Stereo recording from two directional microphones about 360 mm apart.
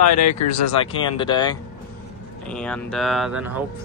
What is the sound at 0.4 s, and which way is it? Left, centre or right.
Speech, left.